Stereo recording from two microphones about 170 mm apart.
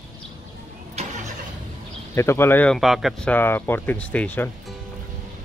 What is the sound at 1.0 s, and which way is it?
Vehicle, 40° right (ahead or behind).